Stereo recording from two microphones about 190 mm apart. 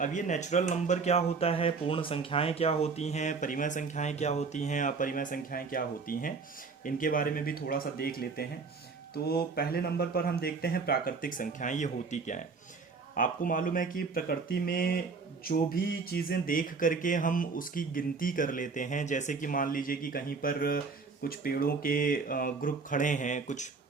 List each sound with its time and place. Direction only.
0.0 s speech: 40° left (ahead or behind)